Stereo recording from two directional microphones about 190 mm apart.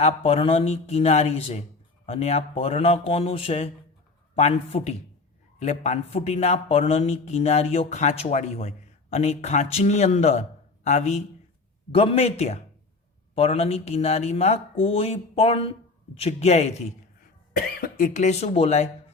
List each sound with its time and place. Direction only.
0.0 s speech: 30° left (ahead or behind)
17.7 s speech: 50° left (ahead or behind); by 18.9 s 35° left (ahead or behind)